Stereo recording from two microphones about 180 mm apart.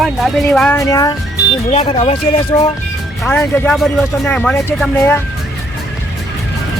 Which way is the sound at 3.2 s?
10° left (ahead or behind).